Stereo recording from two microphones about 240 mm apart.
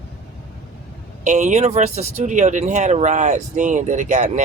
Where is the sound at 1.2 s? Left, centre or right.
Right.